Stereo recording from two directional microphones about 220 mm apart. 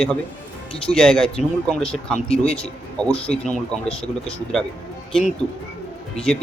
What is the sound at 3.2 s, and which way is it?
Speech, 5° left (ahead or behind).